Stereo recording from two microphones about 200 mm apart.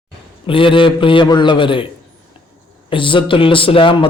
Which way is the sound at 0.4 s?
25° left (ahead or behind).